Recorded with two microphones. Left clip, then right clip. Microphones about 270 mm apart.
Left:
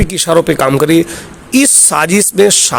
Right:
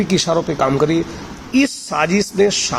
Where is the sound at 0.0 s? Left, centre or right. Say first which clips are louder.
Left 6 dB; left.